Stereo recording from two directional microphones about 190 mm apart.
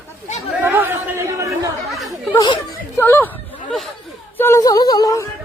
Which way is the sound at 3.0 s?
10° left (ahead or behind).